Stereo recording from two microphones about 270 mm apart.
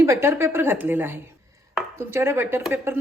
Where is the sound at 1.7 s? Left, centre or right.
Centre.